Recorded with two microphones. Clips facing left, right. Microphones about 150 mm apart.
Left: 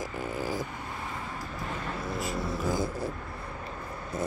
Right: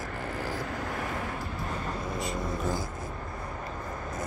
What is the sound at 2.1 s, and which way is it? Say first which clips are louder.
Vehicle: left 1 dB; 5° left (ahead or behind).